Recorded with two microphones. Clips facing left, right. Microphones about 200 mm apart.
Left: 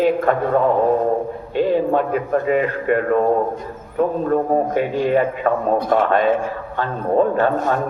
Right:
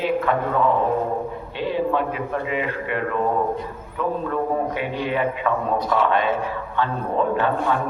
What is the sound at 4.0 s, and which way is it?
A man's voice, 45° left (ahead or behind).